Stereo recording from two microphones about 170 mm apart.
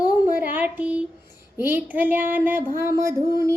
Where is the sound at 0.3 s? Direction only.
10° right (ahead or behind).